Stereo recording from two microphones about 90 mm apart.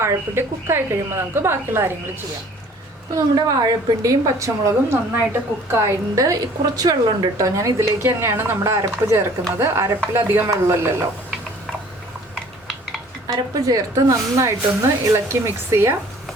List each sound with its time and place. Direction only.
0.0 s a woman's voice: 25° right (ahead or behind)
3.2 s a woman's voice: 50° right (ahead or behind)
7.4 s a woman's voice: 35° right (ahead or behind)
13.2 s a woman's voice: 45° right (ahead or behind)